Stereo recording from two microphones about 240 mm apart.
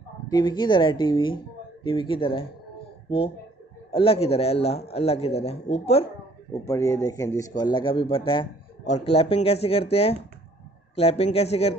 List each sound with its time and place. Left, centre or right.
0.3 s a man's voice: centre
3.9 s a man's voice: left
6.5 s a man's voice: centre